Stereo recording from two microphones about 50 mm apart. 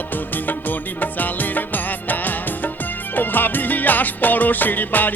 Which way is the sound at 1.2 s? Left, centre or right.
Left.